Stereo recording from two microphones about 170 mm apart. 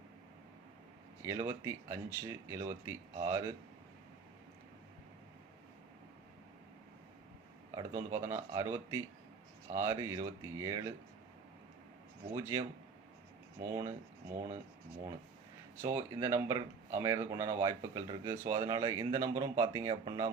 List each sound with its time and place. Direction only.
1.4 s speech: 15° right (ahead or behind)
8.1 s speech: 15° right (ahead or behind)
12.3 s speech: 15° right (ahead or behind)
15.8 s speech: 15° right (ahead or behind)